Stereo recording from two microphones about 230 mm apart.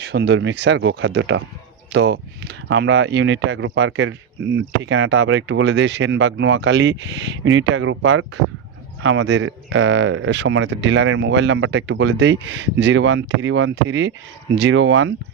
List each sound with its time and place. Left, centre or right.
0.0 s speech: right